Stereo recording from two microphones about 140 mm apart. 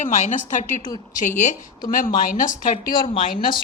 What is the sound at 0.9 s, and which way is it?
Speech, 25° left (ahead or behind).